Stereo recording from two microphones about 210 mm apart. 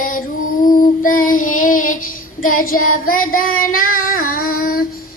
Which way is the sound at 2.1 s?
80° left.